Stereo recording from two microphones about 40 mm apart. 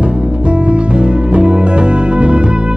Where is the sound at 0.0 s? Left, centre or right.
Right.